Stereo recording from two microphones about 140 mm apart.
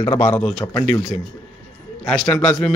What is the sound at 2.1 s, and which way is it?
Speech, 5° left (ahead or behind).